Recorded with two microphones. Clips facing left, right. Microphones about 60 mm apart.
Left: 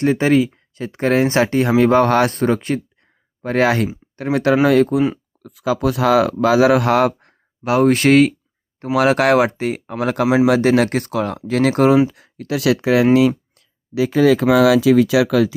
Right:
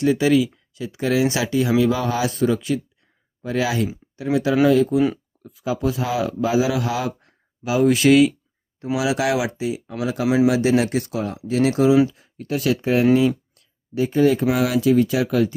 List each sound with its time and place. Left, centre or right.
0.0 s speech: left
5.4 s speech: left
10.0 s speech: left
12.1 s speech: left